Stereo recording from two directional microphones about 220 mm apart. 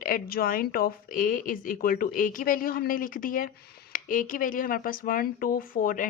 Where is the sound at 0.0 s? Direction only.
40° left (ahead or behind).